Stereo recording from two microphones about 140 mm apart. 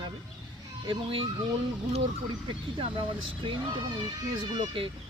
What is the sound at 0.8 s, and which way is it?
Speech, 35° right (ahead or behind).